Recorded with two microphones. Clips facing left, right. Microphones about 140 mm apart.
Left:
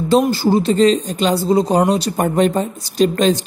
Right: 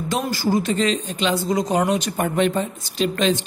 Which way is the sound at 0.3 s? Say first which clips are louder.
Left 6 dB; 30° left (ahead or behind).